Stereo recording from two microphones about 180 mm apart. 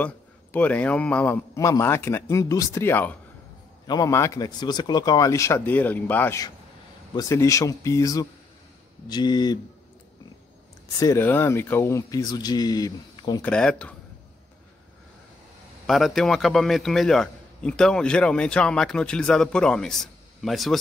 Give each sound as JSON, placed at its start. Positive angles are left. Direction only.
{"t": 0.0, "sound": "a man's voice", "side_deg": 10}
{"t": 3.8, "sound": "a man's voice", "side_deg": 20}
{"t": 11.0, "sound": "speech", "side_deg": 15}
{"t": 13.4, "sound": "a man's voice", "side_deg": 5}
{"t": 15.9, "sound": "a man's voice", "side_deg": 0}